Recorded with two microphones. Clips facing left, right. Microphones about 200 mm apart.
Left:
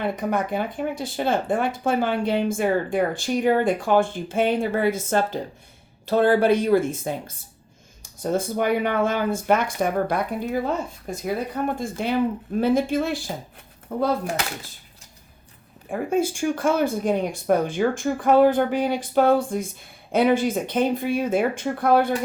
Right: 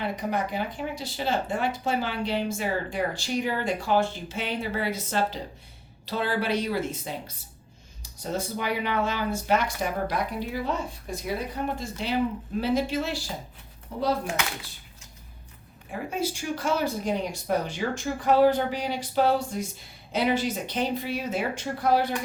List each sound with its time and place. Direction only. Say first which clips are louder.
0.0 s speech: left 4 dB; 50° left (ahead or behind)
15.9 s speech: left 7 dB; 50° left (ahead or behind)